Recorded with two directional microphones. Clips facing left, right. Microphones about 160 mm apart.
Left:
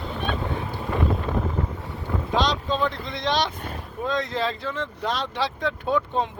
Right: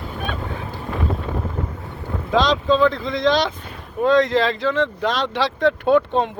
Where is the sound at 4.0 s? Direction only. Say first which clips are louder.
Right 10 dB; 85° right.